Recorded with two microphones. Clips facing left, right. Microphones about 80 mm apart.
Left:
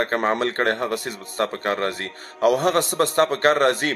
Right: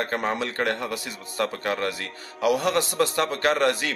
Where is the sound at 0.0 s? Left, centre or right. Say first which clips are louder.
Left 5 dB; left.